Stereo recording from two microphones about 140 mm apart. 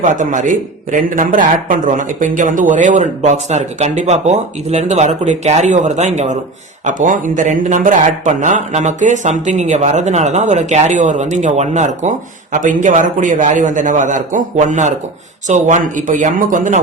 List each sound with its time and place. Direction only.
0.0 s a man's voice: 65° right (ahead or behind)
6.8 s a man's voice: 65° right (ahead or behind)